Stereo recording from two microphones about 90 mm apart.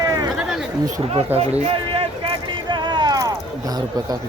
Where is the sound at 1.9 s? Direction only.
90° right; by 4.1 s 45° right (ahead or behind).